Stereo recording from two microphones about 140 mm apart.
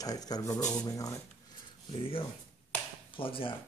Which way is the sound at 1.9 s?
40° left (ahead or behind).